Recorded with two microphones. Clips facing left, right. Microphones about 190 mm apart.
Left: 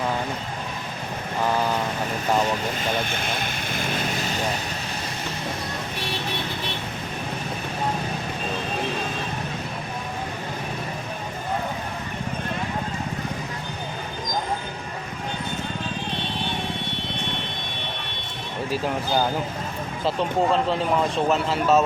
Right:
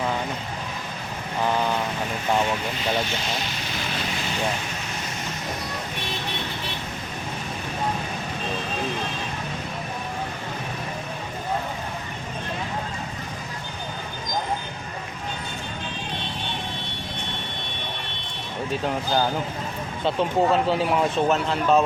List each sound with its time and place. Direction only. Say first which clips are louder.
3.0 s vehicle: even; 55° left (ahead or behind)
20.1 s speech: right 1 dB; centre (ahead or behind)